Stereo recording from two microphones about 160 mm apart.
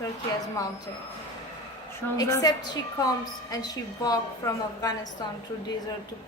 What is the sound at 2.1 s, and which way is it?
A woman's voice, 20° left (ahead or behind).